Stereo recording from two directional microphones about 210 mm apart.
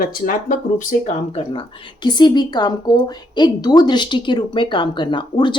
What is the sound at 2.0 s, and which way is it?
Speech, 20° left (ahead or behind).